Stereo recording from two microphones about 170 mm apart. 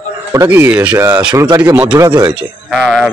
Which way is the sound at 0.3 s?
15° right (ahead or behind).